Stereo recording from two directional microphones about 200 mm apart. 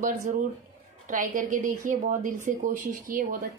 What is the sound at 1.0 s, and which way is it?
A woman's voice, 40° right (ahead or behind).